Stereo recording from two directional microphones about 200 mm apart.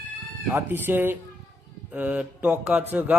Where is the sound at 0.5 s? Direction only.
10° right (ahead or behind).